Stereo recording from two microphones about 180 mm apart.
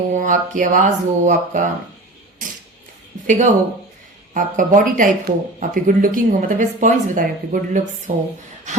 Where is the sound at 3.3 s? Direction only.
45° right (ahead or behind).